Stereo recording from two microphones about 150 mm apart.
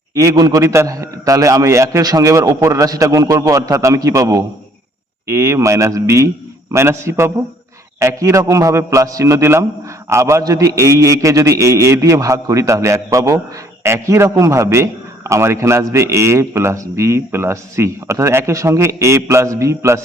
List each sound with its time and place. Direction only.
0.1 s a man's voice: 20° right (ahead or behind)